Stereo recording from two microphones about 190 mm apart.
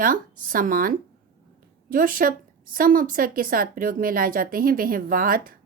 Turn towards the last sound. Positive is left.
turn(degrees=-50)  # may be behind; listen again after turning